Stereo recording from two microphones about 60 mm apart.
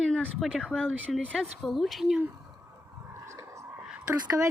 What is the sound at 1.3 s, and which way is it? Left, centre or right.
Speech, centre.